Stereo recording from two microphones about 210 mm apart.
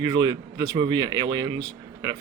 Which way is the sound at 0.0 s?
20° right (ahead or behind).